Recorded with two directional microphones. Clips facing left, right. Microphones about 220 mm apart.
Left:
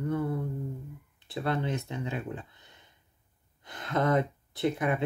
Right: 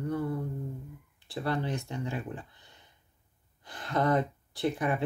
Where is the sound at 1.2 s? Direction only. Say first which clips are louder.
Left 1 dB; 20° left (ahead or behind).